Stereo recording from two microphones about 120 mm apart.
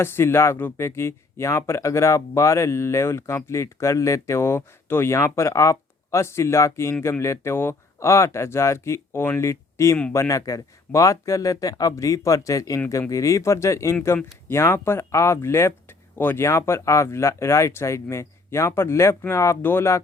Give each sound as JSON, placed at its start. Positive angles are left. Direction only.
{"t": 0.0, "sound": "speech", "side_deg": 20}